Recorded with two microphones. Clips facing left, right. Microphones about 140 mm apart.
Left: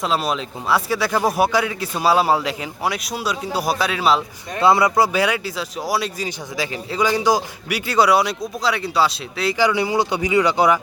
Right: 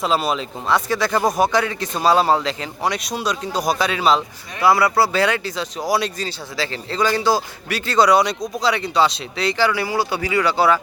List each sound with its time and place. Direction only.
0.0 s speech: centre (ahead or behind)
4.6 s speech: 20° left (ahead or behind); by 6.2 s 5° left (ahead or behind)
6.2 s speech: 15° left (ahead or behind)
9.6 s speech: 20° left (ahead or behind)